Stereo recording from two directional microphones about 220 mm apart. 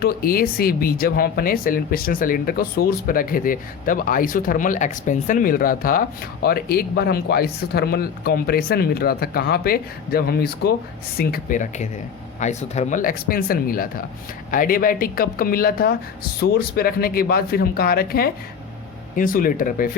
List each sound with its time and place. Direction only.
0.0 s speech: 40° left (ahead or behind)